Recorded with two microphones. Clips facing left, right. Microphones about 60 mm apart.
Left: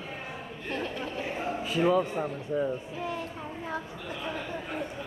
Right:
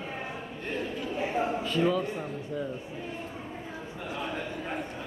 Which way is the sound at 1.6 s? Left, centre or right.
Centre.